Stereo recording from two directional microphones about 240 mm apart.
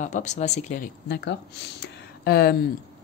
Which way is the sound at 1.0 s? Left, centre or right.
Left.